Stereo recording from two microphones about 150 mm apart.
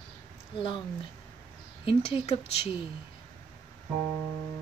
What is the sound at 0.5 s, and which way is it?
Speech, 30° left (ahead or behind).